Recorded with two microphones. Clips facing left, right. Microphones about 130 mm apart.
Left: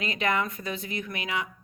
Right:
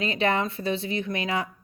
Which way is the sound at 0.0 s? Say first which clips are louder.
Right 3 dB; 30° right (ahead or behind).